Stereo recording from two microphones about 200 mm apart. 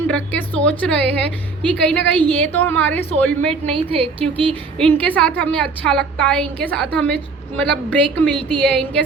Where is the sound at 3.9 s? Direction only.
30° right (ahead or behind).